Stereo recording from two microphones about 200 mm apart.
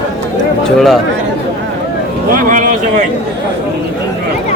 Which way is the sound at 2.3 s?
45° right (ahead or behind).